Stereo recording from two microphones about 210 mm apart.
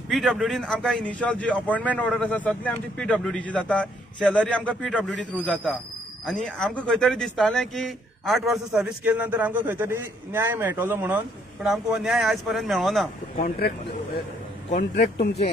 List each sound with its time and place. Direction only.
0.1 s a man's voice: centre (ahead or behind)
13.4 s speech: 50° left (ahead or behind)